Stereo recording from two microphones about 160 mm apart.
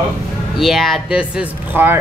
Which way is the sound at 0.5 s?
Centre (ahead or behind).